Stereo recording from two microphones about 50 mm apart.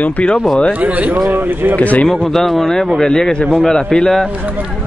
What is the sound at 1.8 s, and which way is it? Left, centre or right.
Speech, left.